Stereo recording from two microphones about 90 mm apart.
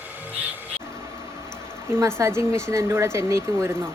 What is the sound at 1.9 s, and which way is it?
Speech, 30° right (ahead or behind).